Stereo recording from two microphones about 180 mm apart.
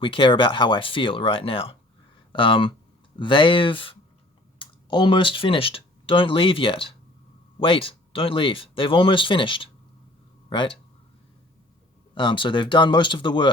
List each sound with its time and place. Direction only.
0.0 s speech: 30° left (ahead or behind)
12.1 s speech: 25° left (ahead or behind)